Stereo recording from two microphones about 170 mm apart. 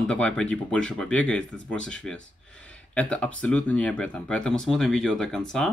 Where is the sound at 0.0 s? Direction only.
5° left (ahead or behind).